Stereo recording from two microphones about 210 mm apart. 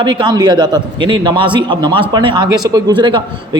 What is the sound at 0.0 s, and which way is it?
A man's voice, 20° right (ahead or behind).